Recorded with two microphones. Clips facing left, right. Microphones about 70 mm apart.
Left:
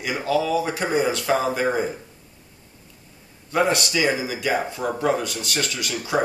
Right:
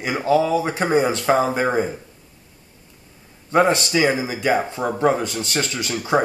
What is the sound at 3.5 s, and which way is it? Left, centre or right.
Speech, right.